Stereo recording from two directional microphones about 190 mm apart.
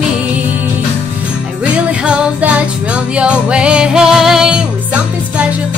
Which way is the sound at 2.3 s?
5° right (ahead or behind).